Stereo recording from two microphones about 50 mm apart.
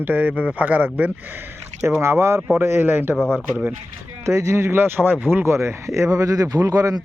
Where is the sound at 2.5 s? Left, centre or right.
Right.